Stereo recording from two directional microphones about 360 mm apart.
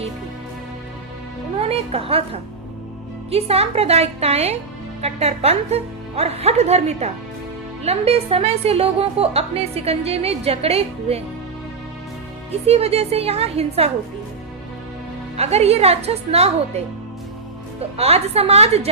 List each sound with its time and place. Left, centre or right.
1.5 s a woman's voice: centre
12.5 s a woman's voice: centre
15.4 s a woman's voice: centre